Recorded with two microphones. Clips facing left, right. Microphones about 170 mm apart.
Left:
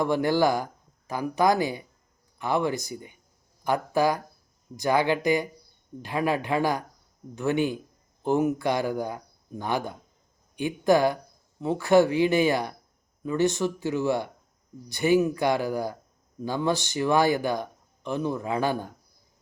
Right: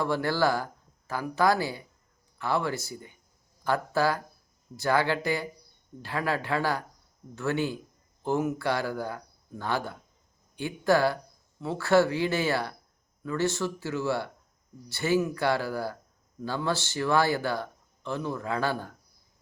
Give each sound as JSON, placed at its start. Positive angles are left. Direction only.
{"t": 0.0, "sound": "speech", "side_deg": 15}